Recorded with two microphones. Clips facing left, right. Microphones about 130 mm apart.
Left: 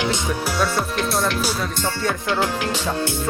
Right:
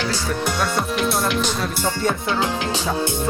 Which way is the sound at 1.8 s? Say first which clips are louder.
Right 2 dB; 15° right (ahead or behind).